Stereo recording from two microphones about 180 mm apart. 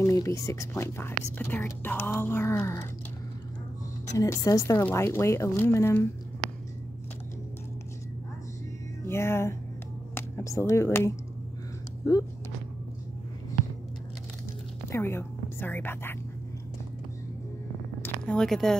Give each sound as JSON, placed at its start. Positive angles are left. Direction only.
{"t": 0.0, "sound": "speech", "side_deg": 15}
{"t": 4.1, "sound": "speech", "side_deg": 20}
{"t": 9.0, "sound": "music", "side_deg": 15}
{"t": 10.1, "sound": "speech", "side_deg": 15}
{"t": 14.9, "sound": "a woman's voice", "side_deg": 15}
{"t": 18.0, "sound": "speech", "side_deg": 5}